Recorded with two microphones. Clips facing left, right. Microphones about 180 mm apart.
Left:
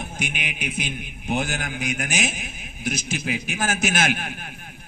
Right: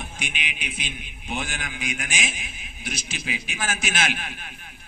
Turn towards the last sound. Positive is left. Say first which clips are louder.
# left 4 dB
turn(degrees=45)  # may be behind; listen again after turning